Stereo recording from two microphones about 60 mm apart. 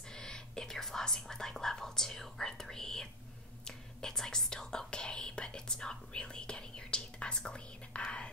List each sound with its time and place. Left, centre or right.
0.1 s whispering: centre